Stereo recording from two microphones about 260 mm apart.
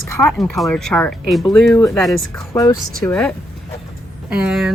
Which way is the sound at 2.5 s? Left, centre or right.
Centre.